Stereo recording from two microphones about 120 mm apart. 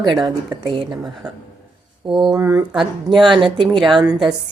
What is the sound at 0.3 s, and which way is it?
Speech, 40° right (ahead or behind).